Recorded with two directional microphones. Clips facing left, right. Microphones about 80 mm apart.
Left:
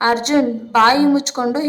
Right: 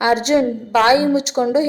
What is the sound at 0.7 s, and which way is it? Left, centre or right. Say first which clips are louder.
Speech: left 1 dB; left.